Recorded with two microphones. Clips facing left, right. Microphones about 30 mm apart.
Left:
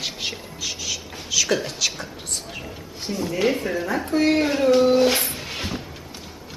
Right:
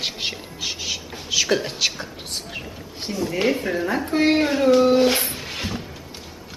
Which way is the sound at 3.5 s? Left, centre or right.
Centre.